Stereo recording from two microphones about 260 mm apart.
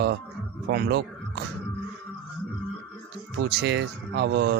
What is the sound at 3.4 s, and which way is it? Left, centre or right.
Speech, right.